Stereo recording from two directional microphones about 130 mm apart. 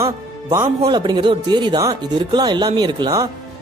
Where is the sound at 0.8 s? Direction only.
35° right (ahead or behind).